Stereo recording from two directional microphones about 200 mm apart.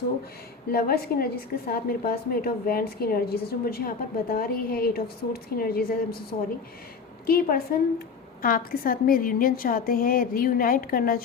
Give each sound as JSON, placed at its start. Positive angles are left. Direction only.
{"t": 0.7, "sound": "a woman's voice", "side_deg": 50}
{"t": 7.3, "sound": "a woman's voice", "side_deg": 50}